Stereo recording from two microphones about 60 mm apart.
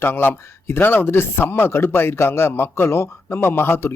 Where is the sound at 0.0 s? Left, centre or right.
Left.